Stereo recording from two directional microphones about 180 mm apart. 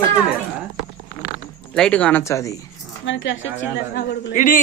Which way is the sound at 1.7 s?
5° left (ahead or behind).